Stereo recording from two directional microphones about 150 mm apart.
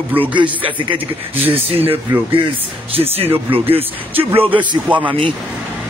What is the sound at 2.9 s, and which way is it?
Speech, 40° right (ahead or behind).